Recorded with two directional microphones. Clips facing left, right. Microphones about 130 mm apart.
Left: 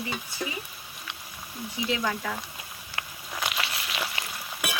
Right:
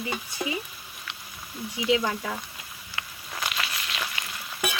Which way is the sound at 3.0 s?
40° left (ahead or behind).